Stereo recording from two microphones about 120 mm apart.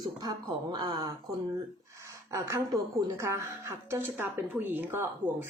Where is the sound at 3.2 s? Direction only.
25° right (ahead or behind).